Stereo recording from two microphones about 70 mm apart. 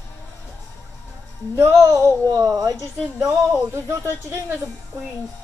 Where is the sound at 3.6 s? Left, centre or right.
Right.